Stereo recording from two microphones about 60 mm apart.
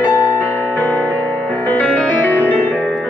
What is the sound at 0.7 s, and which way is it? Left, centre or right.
Music, left.